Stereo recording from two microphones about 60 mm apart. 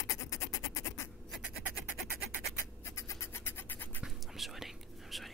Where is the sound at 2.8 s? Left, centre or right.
Left.